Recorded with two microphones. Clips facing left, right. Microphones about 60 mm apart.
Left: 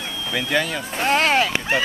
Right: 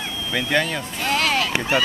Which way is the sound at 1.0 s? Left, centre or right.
Left.